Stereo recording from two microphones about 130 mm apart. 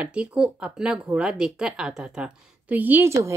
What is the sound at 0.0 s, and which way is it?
Speech, 10° right (ahead or behind).